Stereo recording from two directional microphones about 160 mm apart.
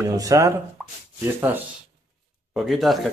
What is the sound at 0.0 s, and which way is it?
Speech, 20° right (ahead or behind).